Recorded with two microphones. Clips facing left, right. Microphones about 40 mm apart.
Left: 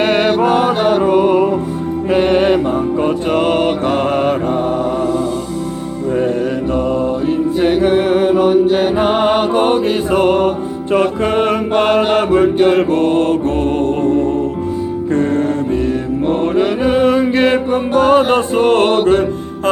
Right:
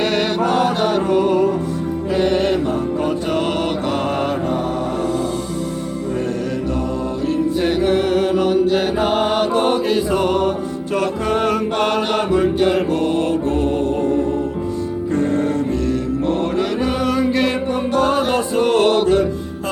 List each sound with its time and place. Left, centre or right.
0.0 s music: left
3.3 s mantra: left
7.3 s music: left
10.9 s mantra: left
15.1 s music: left
15.9 s mantra: left